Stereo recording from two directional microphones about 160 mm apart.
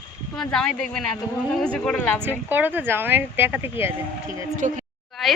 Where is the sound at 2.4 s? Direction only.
10° right (ahead or behind).